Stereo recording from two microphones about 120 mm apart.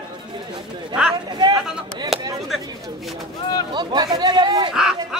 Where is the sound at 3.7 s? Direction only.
40° right (ahead or behind).